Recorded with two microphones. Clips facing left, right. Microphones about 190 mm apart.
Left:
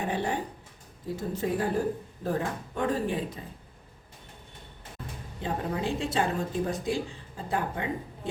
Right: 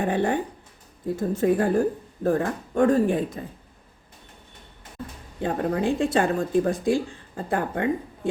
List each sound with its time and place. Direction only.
0.0 s speech: 55° right (ahead or behind)
5.4 s speech: 55° right (ahead or behind)